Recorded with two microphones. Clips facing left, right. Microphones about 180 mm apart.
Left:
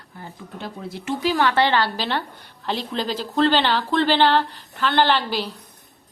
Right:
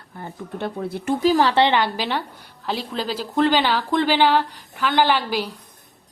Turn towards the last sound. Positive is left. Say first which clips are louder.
# even
turn(degrees=-10)  # may be behind; listen again after turning